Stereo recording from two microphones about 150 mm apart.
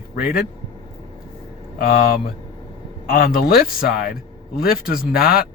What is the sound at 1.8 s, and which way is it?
Speech, 75° left (ahead or behind).